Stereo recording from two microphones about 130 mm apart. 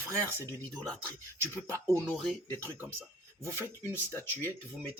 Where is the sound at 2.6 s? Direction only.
15° right (ahead or behind).